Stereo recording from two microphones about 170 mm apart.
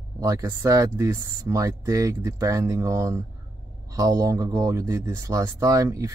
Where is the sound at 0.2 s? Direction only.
20° right (ahead or behind).